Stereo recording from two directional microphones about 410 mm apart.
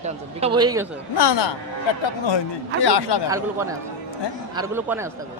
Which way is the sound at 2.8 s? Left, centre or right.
Left.